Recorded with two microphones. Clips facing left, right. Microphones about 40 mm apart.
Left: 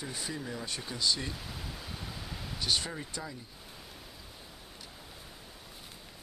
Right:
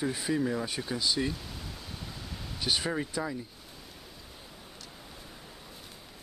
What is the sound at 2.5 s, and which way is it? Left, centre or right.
Speech, centre.